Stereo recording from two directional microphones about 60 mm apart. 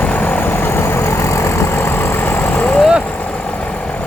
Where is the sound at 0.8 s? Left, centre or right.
Left.